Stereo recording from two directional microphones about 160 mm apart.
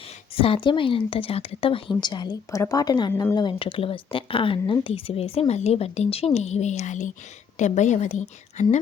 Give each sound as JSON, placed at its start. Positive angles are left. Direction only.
{"t": 0.3, "sound": "a woman's voice", "side_deg": 35}
{"t": 3.1, "sound": "speech", "side_deg": 15}
{"t": 3.3, "sound": "a woman's voice", "side_deg": 30}